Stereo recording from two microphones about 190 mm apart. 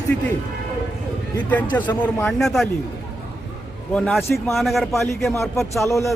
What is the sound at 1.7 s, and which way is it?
Speech, 15° left (ahead or behind).